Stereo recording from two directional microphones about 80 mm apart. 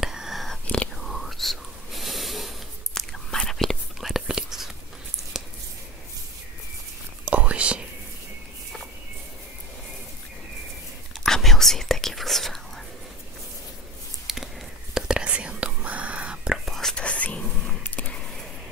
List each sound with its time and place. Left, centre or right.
0.0 s whispering: centre
7.2 s whispering: centre
11.1 s whispering: centre
14.2 s a sound: centre
15.0 s whispering: centre
16.6 s whispering: centre
17.0 s whispering: centre